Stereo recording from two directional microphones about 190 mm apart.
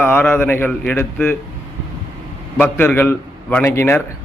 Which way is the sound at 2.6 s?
10° left (ahead or behind).